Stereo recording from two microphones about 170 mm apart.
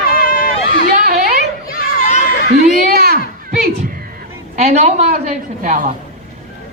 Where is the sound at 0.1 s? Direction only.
60° left (ahead or behind).